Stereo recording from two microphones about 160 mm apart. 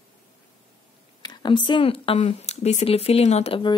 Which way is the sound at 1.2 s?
30° left (ahead or behind).